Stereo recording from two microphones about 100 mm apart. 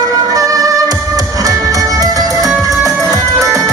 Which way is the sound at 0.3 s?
35° right (ahead or behind).